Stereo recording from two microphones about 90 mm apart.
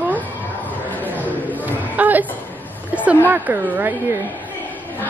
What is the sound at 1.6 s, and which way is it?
Chatter, 20° right (ahead or behind).